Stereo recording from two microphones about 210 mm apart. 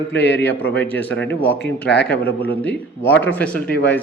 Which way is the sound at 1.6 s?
55° left (ahead or behind).